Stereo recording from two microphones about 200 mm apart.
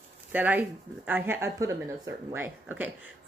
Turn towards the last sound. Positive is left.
turn(degrees=-10)  # may be behind; listen again after turning